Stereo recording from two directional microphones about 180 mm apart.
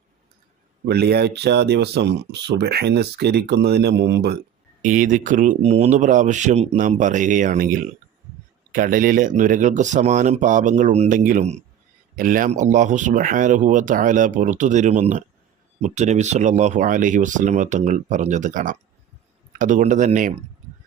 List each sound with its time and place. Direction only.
0.9 s speech: 60° right (ahead or behind)
4.8 s speech: 45° right (ahead or behind)